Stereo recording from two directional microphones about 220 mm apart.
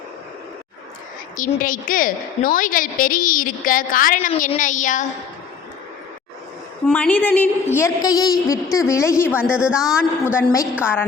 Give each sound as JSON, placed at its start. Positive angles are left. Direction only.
{"t": 1.4, "sound": "a woman's voice", "side_deg": 40}
{"t": 6.8, "sound": "a woman's voice", "side_deg": 5}
{"t": 9.6, "sound": "a man's voice", "side_deg": -5}
{"t": 10.2, "sound": "a woman's voice", "side_deg": 10}